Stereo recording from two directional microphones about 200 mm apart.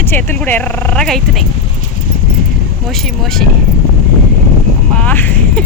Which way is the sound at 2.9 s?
Centre (ahead or behind).